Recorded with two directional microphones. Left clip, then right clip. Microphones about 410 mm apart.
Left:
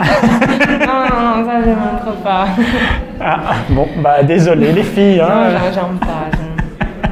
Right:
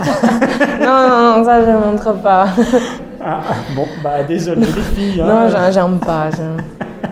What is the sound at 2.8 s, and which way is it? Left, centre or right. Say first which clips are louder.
A man's voice: even; left.